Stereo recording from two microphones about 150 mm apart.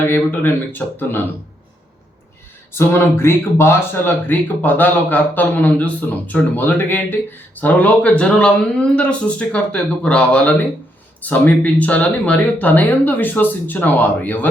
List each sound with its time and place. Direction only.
0.1 s speech: 10° left (ahead or behind)
2.7 s speech: 15° left (ahead or behind)